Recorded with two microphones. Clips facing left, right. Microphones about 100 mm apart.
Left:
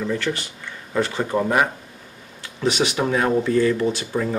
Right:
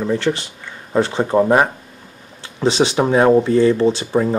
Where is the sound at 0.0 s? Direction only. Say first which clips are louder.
Right 5 dB; 30° right (ahead or behind).